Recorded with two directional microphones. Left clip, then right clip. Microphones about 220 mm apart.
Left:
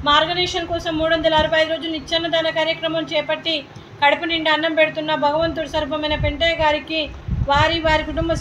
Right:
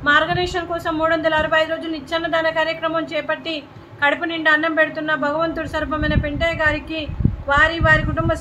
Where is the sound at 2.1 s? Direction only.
15° right (ahead or behind).